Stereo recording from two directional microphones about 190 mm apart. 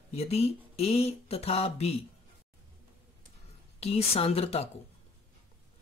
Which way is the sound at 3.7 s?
30° left (ahead or behind).